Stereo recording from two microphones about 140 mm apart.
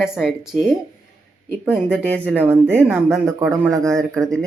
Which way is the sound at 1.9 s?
10° left (ahead or behind).